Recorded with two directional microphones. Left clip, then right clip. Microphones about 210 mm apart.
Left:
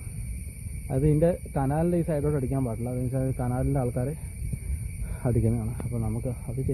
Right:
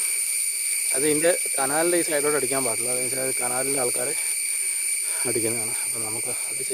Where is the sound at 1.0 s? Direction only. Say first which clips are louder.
Right 2 dB; 15° right (ahead or behind).